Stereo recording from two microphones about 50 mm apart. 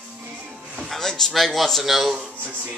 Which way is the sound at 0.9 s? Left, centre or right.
Centre.